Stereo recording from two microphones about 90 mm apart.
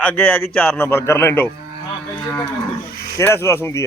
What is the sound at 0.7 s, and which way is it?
Speech, 25° left (ahead or behind).